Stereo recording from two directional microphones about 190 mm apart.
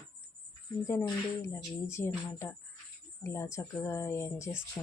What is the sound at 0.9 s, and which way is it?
Speech, 15° left (ahead or behind).